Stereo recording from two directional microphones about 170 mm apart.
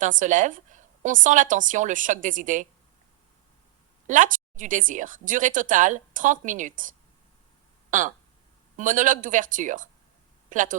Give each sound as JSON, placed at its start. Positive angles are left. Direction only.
{"t": 0.0, "sound": "a woman's voice", "side_deg": -50}
{"t": 4.0, "sound": "a woman's voice", "side_deg": -50}